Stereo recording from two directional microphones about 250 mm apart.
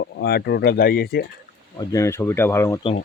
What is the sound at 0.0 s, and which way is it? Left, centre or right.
Speech, left.